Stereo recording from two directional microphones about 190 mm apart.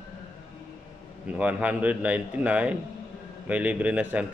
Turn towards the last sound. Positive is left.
turn(degrees=-5)  # may be behind; listen again after turning